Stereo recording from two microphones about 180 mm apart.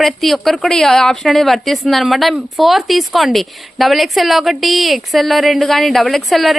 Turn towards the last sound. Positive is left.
turn(degrees=0)  # may be behind; listen again after turning